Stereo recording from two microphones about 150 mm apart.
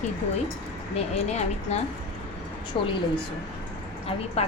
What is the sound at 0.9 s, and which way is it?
Speech, 45° left (ahead or behind).